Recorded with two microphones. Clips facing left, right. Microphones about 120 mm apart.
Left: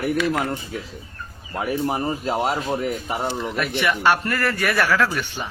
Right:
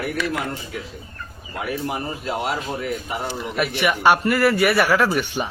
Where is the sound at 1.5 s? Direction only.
35° left (ahead or behind).